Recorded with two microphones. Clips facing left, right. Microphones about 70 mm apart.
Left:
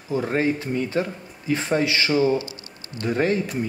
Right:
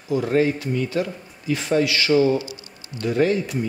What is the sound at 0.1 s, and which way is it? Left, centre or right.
Speech, left.